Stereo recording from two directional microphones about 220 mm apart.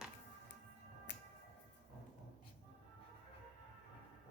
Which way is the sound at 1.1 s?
55° left (ahead or behind).